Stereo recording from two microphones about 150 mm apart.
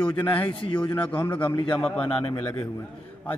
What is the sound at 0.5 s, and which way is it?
Speech, 35° left (ahead or behind).